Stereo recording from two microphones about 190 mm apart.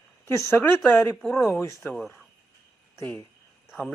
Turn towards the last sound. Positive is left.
turn(degrees=0)  # may be behind; listen again after turning